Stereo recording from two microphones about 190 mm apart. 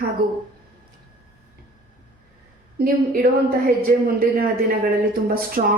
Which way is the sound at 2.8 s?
50° right (ahead or behind).